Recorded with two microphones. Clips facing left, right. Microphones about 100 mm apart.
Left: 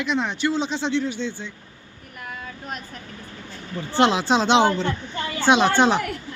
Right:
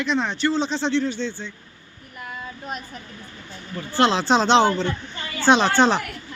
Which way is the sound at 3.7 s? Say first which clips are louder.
Left 1 dB; 25° left (ahead or behind).